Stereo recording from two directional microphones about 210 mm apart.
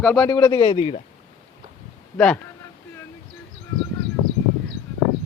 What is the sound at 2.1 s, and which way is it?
Speech, 5° left (ahead or behind).